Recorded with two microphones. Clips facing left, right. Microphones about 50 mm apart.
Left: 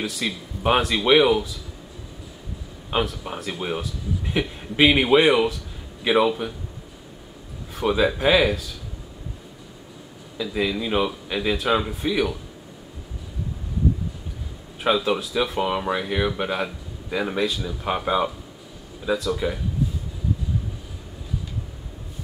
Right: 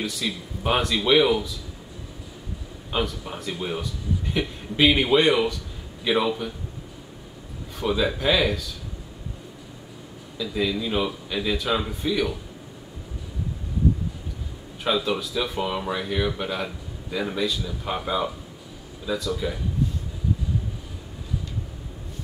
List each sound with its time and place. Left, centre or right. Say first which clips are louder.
0.0 s a man's voice: left 1 dB; centre
3.1 s a man's voice: left 1 dB; centre
7.7 s a man's voice: left 3 dB; centre
10.4 s a man's voice: left 1 dB; centre
15.0 s a man's voice: left 3 dB; centre
15.6 s speech: left 3 dB; centre
17.8 s speech: left 4 dB; centre
19.1 s a man's voice: left 2 dB; centre